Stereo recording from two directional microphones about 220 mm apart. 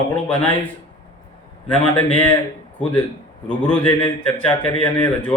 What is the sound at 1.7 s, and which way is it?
Speech, 5° left (ahead or behind).